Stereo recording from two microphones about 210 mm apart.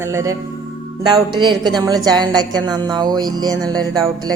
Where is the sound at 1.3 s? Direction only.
20° right (ahead or behind).